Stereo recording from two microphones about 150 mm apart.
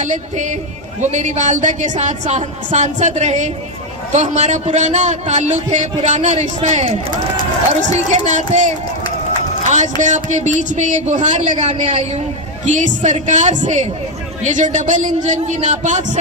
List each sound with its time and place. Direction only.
0.0 s a man's voice: 55° right (ahead or behind)
11.6 s a woman's voice: 40° right (ahead or behind)
12.6 s a man's voice: 55° right (ahead or behind)